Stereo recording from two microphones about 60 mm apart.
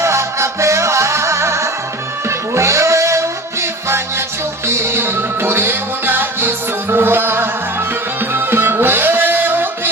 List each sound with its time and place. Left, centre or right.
0.0 s music: right